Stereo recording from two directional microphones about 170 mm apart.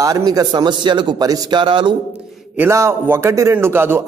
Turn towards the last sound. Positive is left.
turn(degrees=-15)  # may be behind; listen again after turning